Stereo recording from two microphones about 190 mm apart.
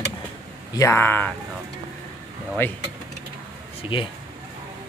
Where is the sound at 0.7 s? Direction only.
15° left (ahead or behind).